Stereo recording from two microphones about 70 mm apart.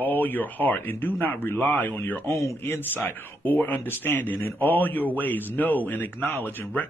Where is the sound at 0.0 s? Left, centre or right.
Left.